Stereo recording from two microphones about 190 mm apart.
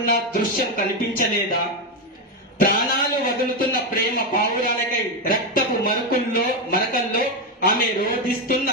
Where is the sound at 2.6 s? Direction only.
50° left (ahead or behind).